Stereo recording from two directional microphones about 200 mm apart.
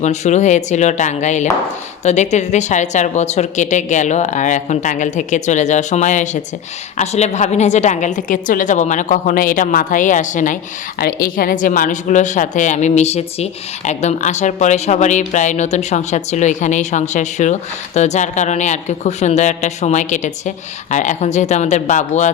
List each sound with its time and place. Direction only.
0.0 s a woman's voice: 35° left (ahead or behind)